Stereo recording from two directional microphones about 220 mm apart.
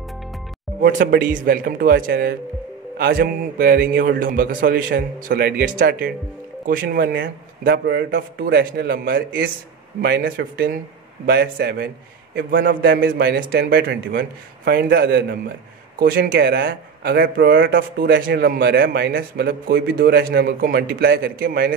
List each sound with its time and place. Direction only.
0.7 s a man's voice: 40° right (ahead or behind)